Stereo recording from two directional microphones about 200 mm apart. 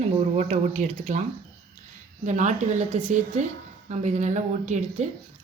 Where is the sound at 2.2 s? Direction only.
35° right (ahead or behind).